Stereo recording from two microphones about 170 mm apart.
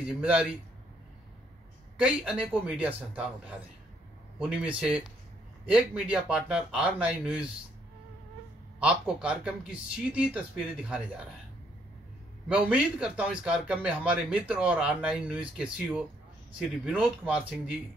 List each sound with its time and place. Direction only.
0.2 s a man's voice: 5° right (ahead or behind)
2.0 s a man's voice: 5° right (ahead or behind)
8.7 s a man's voice: 5° right (ahead or behind)
12.4 s a man's voice: 5° right (ahead or behind)